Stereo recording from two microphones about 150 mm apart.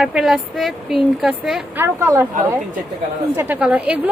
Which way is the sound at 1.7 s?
15° right (ahead or behind).